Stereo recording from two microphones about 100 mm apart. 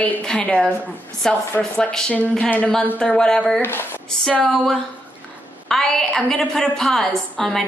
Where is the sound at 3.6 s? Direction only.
20° left (ahead or behind).